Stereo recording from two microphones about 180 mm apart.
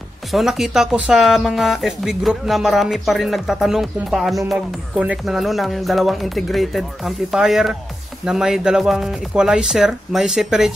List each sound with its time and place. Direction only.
0.3 s speech: centre (ahead or behind)